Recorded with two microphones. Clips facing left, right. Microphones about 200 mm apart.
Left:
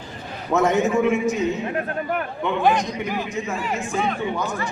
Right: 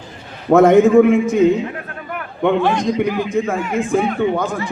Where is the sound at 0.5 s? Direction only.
55° right (ahead or behind).